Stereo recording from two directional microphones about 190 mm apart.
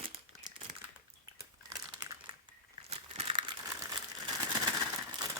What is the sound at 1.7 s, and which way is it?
Crumpling, 20° right (ahead or behind).